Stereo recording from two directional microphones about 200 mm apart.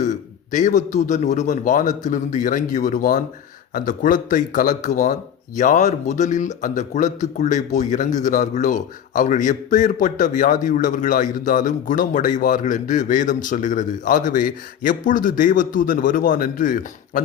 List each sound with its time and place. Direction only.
0.0 s a man's voice: 40° left (ahead or behind)